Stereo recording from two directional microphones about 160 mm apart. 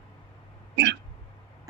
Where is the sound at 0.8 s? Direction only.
90° right.